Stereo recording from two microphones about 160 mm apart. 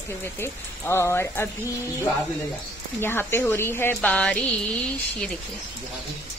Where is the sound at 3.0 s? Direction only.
15° left (ahead or behind).